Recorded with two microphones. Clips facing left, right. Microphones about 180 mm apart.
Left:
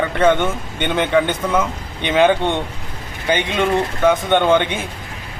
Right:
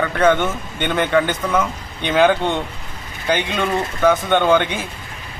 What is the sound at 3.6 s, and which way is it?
A man's voice, 15° left (ahead or behind).